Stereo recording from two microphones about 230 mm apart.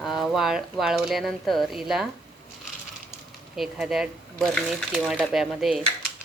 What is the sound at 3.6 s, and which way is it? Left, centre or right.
Speech, centre.